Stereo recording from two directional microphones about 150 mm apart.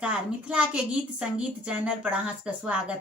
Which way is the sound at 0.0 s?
5° right (ahead or behind).